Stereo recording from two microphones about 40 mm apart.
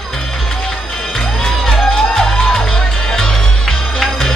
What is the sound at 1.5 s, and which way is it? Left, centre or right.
Music, centre.